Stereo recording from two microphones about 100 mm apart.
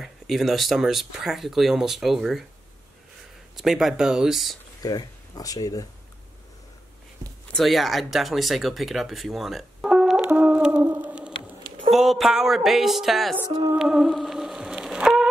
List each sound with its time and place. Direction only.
0.0 s speech: centre (ahead or behind)
3.5 s speech: 5° right (ahead or behind)
4.8 s speech: 40° left (ahead or behind)
7.5 s speech: centre (ahead or behind)
10.2 s a sound: 15° right (ahead or behind)
11.9 s speech: centre (ahead or behind)
13.7 s shofar: 5° right (ahead or behind)